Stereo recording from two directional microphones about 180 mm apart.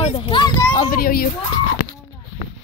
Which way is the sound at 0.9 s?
55° left (ahead or behind).